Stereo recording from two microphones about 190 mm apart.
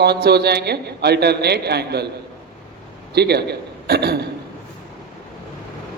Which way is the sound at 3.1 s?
60° right (ahead or behind).